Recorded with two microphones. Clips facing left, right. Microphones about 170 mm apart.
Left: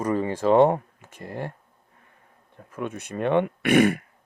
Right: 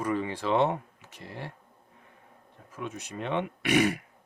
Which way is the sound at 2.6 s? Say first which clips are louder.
Left 6 dB; 55° left (ahead or behind).